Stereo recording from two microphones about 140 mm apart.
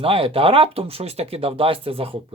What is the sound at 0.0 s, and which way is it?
Speech, 40° right (ahead or behind).